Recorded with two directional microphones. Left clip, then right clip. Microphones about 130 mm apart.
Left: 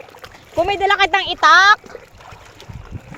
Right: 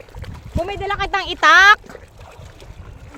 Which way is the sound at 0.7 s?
85° left.